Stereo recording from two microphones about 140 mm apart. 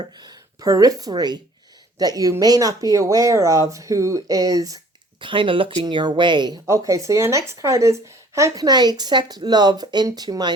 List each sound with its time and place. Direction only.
0.2 s speech: 25° right (ahead or behind)
5.2 s speech: 35° right (ahead or behind)
6.7 s speech: 20° right (ahead or behind)